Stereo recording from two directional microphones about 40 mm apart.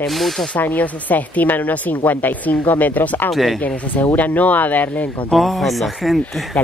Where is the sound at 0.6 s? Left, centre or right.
Left.